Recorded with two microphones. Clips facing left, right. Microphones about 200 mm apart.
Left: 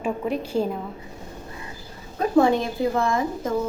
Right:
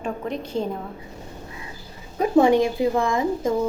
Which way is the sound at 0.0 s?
5° left (ahead or behind).